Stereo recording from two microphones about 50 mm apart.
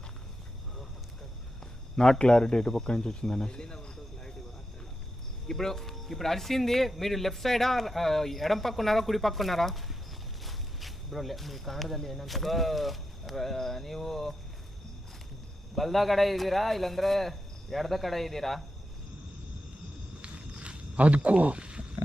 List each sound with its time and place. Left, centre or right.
2.0 s speech: centre
5.5 s speech: centre
15.7 s speech: centre
20.2 s a sound: right